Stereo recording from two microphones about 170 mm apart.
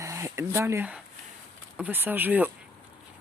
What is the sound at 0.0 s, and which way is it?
Speech, 15° right (ahead or behind).